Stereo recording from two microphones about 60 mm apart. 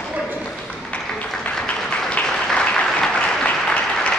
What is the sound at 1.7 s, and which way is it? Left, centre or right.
Applause, left.